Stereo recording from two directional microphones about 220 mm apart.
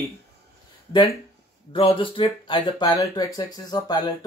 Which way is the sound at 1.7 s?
25° left (ahead or behind).